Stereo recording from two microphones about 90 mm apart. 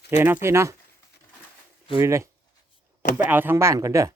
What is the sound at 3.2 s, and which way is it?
Speech, 20° right (ahead or behind).